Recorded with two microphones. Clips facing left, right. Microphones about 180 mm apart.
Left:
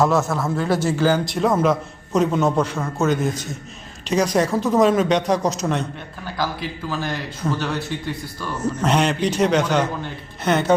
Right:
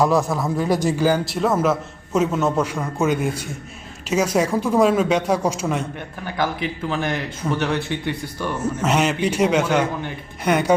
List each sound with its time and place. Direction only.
0.0 s a man's voice: 15° right (ahead or behind)
6.4 s a man's voice: 20° right (ahead or behind)
8.8 s a man's voice: 5° right (ahead or behind)